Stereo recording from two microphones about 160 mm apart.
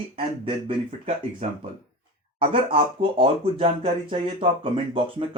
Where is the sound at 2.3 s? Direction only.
35° right (ahead or behind).